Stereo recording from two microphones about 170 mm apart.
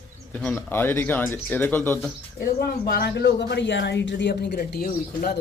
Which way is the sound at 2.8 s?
65° left (ahead or behind).